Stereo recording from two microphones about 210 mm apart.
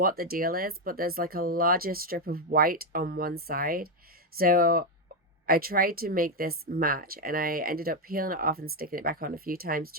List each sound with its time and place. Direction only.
0.0 s speech: 45° right (ahead or behind)